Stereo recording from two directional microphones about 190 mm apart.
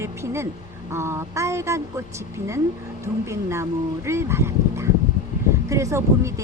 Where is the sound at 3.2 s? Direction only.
15° right (ahead or behind).